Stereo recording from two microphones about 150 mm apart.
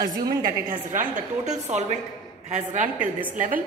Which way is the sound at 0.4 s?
65° right (ahead or behind).